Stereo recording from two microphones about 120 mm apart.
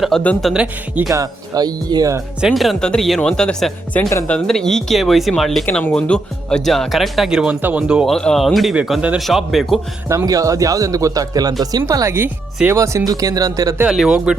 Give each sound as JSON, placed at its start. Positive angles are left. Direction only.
{"t": 0.1, "sound": "speech", "side_deg": 0}
{"t": 1.1, "sound": "speech", "side_deg": -30}
{"t": 2.4, "sound": "speech", "side_deg": 0}
{"t": 8.0, "sound": "speech", "side_deg": 5}
{"t": 10.1, "sound": "speech", "side_deg": -30}
{"t": 13.8, "sound": "speech", "side_deg": -5}